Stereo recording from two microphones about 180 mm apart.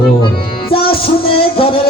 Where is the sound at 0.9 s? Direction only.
30° left (ahead or behind).